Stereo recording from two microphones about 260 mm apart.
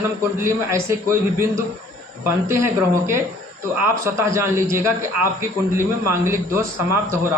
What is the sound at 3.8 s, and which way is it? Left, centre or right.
Speech, centre.